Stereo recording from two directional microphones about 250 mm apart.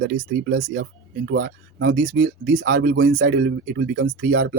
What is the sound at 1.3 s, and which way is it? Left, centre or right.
Speech, right.